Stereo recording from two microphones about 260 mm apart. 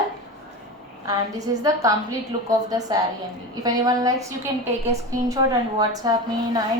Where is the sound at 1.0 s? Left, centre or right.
Centre.